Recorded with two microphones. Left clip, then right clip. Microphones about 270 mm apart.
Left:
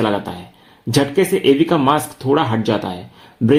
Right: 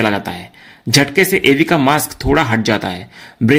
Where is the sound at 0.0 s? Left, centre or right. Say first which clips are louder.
Right 2 dB; right.